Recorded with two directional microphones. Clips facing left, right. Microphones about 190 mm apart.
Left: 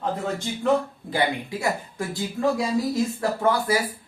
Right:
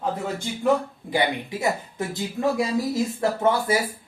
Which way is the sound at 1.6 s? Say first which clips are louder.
Right 2 dB; 20° right (ahead or behind).